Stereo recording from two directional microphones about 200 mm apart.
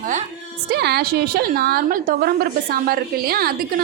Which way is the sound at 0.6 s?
55° right (ahead or behind).